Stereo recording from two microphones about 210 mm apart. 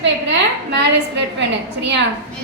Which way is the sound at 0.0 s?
55° right (ahead or behind).